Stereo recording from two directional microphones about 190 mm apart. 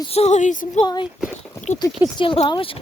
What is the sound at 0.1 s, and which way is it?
Speech, 35° left (ahead or behind).